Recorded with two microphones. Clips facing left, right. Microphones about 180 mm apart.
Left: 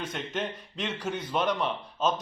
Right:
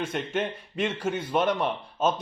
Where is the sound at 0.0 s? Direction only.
10° right (ahead or behind).